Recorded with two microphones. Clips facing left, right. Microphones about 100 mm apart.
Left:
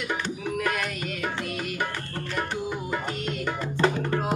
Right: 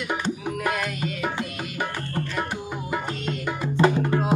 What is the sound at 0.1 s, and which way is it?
Music, 10° right (ahead or behind).